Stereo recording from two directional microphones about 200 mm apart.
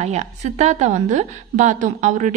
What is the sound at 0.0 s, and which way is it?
A woman's voice, 35° right (ahead or behind).